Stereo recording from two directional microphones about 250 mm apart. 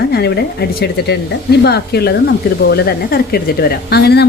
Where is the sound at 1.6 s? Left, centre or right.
Left.